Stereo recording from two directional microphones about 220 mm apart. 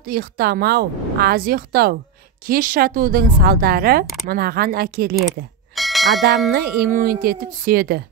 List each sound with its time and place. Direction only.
0.0 s a woman's voice: 40° right (ahead or behind)
5.8 s bell: centre (ahead or behind)
6.5 s a woman's voice: 45° right (ahead or behind)